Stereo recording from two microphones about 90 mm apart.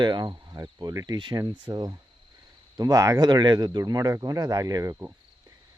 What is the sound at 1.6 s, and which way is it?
Speech, 45° right (ahead or behind).